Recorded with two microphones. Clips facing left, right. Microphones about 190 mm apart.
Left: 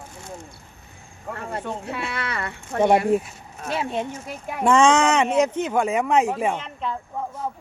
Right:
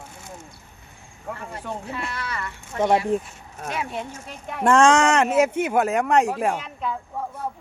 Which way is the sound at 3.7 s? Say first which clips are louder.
Left 4 dB; 25° left (ahead or behind).